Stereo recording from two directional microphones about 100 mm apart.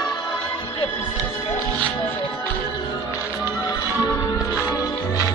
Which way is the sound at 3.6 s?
35° left (ahead or behind).